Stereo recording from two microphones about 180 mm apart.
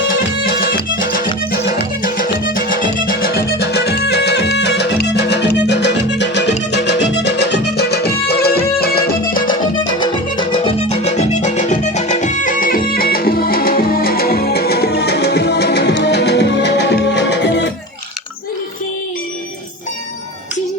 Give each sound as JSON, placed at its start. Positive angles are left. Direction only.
{"t": 0.7, "sound": "music", "side_deg": 50}
{"t": 9.5, "sound": "music", "side_deg": 25}